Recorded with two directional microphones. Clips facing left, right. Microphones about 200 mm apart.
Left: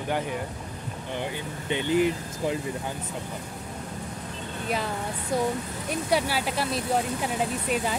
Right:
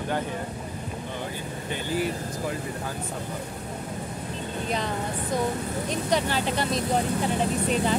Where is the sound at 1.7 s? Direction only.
20° left (ahead or behind).